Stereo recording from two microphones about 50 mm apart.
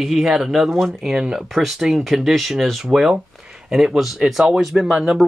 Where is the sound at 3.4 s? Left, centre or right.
Centre.